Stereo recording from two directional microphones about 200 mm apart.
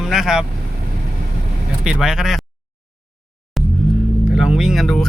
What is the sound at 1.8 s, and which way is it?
Speech, 5° right (ahead or behind).